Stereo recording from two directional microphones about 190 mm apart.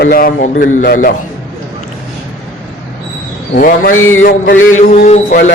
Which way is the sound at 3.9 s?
90° left.